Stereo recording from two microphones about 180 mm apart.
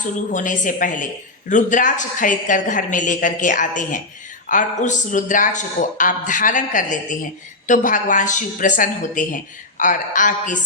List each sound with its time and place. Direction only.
0.0 s a woman's voice: 45° left (ahead or behind)